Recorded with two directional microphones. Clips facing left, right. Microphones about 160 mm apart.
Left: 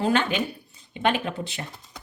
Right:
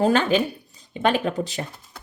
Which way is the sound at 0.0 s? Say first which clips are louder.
Right 4 dB; 40° right (ahead or behind).